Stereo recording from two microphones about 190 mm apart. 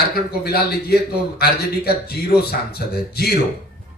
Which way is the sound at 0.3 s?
55° left (ahead or behind).